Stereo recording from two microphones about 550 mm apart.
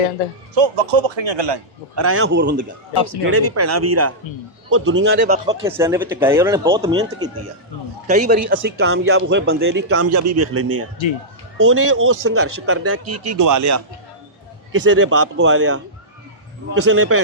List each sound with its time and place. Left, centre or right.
0.5 s speech: right
2.0 s speech: right
2.9 s speech: left
3.5 s a man's voice: right
13.1 s speech: right